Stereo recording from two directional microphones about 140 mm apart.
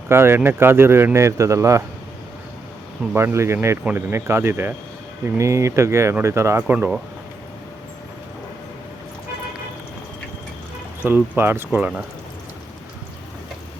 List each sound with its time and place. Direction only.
0.1 s a man's voice: 15° right (ahead or behind)
3.2 s a man's voice: 20° right (ahead or behind)
11.0 s a man's voice: 15° right (ahead or behind)